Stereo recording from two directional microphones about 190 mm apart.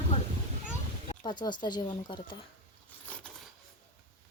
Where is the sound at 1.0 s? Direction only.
25° left (ahead or behind).